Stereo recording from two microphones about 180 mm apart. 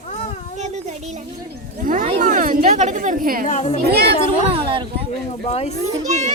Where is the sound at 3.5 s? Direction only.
40° left (ahead or behind).